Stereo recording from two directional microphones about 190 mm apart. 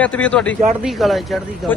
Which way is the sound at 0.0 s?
5° left (ahead or behind).